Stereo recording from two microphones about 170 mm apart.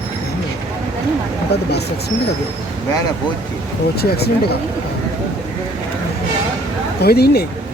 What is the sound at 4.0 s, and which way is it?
Speech, 70° left (ahead or behind).